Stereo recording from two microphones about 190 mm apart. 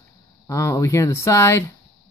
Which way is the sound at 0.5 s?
15° left (ahead or behind).